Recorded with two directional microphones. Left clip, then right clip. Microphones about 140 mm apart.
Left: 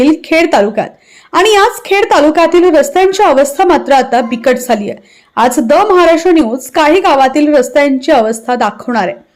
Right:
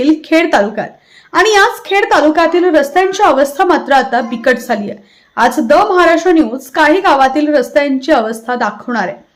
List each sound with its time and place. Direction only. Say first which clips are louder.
0.0 s a woman's voice: left 2 dB; 25° left (ahead or behind)